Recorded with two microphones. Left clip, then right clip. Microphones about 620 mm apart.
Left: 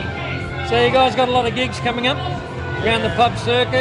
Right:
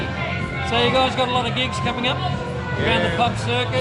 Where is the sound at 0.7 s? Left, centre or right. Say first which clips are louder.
Left 4 dB; left.